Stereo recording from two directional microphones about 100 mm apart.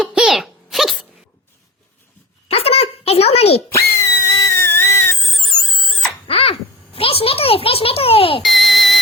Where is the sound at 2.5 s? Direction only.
85° left.